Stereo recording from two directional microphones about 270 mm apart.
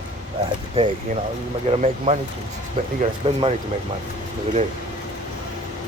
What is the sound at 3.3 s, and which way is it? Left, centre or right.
Speech, right.